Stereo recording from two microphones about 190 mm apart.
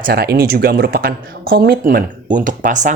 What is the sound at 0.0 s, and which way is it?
Speech, 55° right (ahead or behind).